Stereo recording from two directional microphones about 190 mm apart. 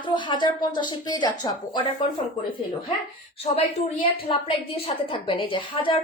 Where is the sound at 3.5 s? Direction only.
35° left (ahead or behind).